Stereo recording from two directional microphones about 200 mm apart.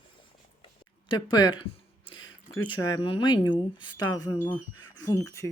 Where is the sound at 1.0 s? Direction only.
25° left (ahead or behind).